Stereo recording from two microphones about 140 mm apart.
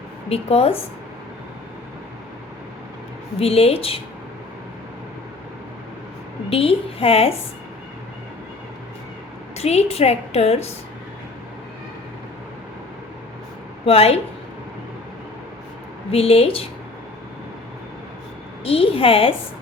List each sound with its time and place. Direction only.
0.3 s a woman's voice: 45° left (ahead or behind)
3.3 s a woman's voice: 45° left (ahead or behind)
6.5 s a woman's voice: 45° left (ahead or behind)
9.6 s a woman's voice: 50° left (ahead or behind)
13.8 s a woman's voice: 45° left (ahead or behind)
16.1 s a woman's voice: 45° left (ahead or behind)
18.6 s a woman's voice: 40° left (ahead or behind)